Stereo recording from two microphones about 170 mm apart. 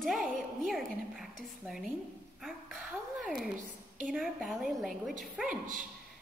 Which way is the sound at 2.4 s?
Centre (ahead or behind).